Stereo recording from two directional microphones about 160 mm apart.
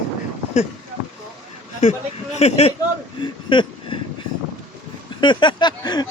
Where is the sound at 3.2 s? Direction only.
30° left (ahead or behind).